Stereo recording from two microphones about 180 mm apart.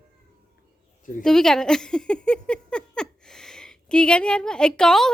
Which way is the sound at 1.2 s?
5° left (ahead or behind).